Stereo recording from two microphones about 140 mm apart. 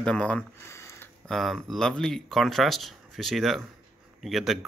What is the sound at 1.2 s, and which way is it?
Speech, centre (ahead or behind).